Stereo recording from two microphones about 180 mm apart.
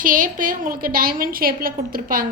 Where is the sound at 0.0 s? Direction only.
50° right (ahead or behind).